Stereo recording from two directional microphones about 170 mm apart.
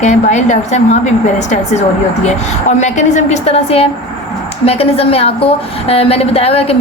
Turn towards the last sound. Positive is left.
turn(degrees=35)  # may be behind; listen again after turning